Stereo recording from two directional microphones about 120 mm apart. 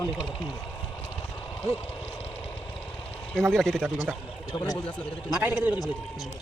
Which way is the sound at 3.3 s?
5° left (ahead or behind).